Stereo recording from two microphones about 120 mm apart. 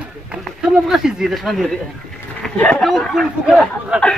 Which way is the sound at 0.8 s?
5° right (ahead or behind).